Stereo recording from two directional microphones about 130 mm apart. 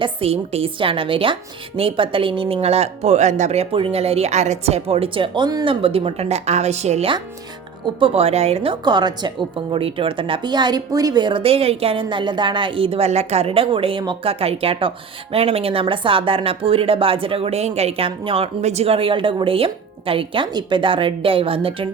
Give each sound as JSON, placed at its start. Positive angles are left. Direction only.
{"t": 0.0, "sound": "a woman's voice", "side_deg": -50}
{"t": 5.8, "sound": "speech", "side_deg": -45}
{"t": 7.9, "sound": "a woman's voice", "side_deg": -45}